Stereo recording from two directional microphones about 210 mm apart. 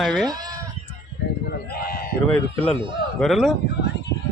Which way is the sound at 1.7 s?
45° left (ahead or behind).